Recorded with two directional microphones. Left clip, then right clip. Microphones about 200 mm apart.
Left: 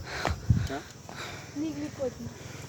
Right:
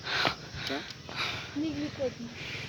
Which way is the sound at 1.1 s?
5° left (ahead or behind).